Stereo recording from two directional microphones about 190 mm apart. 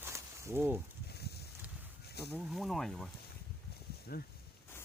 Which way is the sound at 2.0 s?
60° left (ahead or behind).